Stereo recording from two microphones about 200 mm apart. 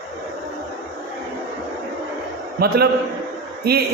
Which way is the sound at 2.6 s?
50° right (ahead or behind).